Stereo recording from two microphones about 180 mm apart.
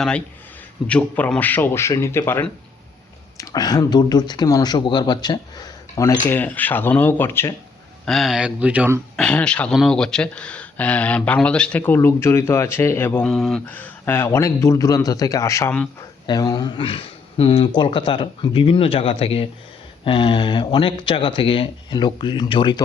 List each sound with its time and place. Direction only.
0.9 s speech: 10° left (ahead or behind)
8.0 s speech: centre (ahead or behind)
9.1 s speech: 5° left (ahead or behind)
13.2 s speech: centre (ahead or behind); by 22.8 s 25° left (ahead or behind)